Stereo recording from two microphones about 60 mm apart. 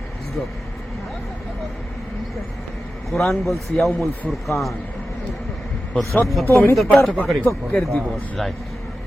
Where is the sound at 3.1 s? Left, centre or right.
Centre.